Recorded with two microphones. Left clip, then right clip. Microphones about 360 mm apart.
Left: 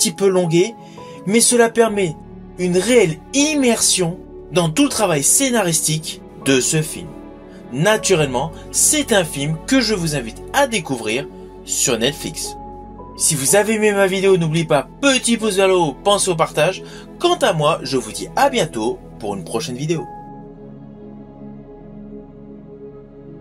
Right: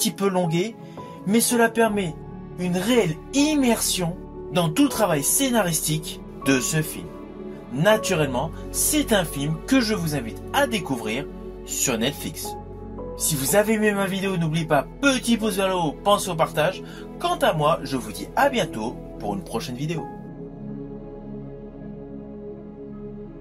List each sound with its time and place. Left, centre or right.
0.2 s speech: right
9.7 s speech: right
13.5 s speech: right